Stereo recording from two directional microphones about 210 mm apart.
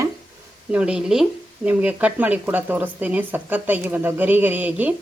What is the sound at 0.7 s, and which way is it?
Speech, 5° right (ahead or behind).